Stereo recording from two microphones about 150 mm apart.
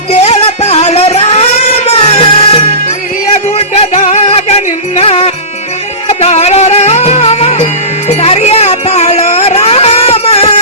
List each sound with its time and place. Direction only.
0.1 s music: 45° left (ahead or behind)